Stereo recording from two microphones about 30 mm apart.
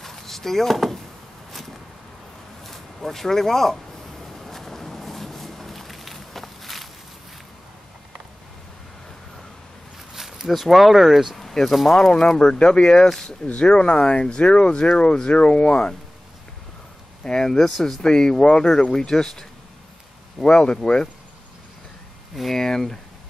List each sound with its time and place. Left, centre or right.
0.0 s drawer open or close: centre
2.6 s speech: centre
4.5 s a sound: centre
10.1 s speech: centre
11.3 s a sound: centre
12.4 s speech: left
13.6 s speech: left
17.2 s speech: left
17.6 s speech: centre
18.0 s speech: left
20.4 s speech: left
22.3 s speech: centre
22.6 s speech: centre